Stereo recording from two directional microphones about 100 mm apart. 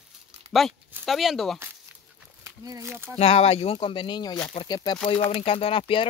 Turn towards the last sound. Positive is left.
turn(degrees=60)  # may be behind; listen again after turning